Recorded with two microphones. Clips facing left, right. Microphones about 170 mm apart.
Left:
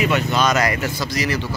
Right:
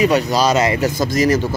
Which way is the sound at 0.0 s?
35° right (ahead or behind).